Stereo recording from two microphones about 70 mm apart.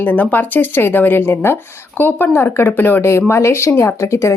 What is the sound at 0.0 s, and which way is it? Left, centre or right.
A woman's voice, left.